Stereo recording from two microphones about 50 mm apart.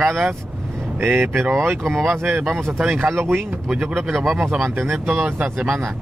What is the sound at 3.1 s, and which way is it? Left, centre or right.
Speech, right.